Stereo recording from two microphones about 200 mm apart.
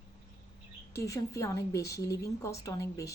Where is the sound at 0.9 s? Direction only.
15° left (ahead or behind).